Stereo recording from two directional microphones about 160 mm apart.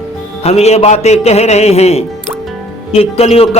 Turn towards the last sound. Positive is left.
turn(degrees=40)  # may be behind; listen again after turning